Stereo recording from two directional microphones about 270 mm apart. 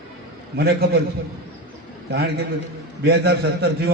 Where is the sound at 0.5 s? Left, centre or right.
Right.